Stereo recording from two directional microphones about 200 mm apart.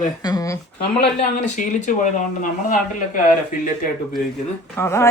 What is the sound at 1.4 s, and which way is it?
Speech, 35° left (ahead or behind).